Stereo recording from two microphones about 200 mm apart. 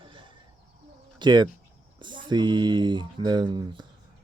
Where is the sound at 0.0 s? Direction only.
25° right (ahead or behind).